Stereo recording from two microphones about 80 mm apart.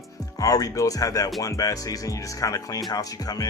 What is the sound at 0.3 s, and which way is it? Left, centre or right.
Speech, left.